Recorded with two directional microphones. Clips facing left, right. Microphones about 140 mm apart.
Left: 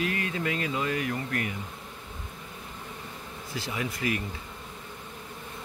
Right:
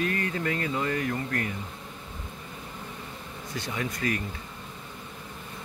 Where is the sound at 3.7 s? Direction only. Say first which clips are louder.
Even; 15° left (ahead or behind).